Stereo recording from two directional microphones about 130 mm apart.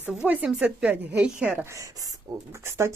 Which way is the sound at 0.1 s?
5° right (ahead or behind).